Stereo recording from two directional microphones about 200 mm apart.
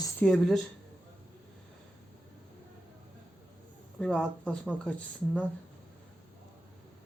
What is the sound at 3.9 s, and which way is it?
Speech, 5° left (ahead or behind).